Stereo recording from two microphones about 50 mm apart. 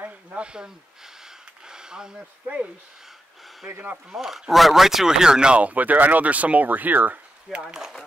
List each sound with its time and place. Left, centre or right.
0.0 s a sound: right
3.6 s speech: right
4.1 s speech: centre
5.6 s speech: right
7.6 s speech: centre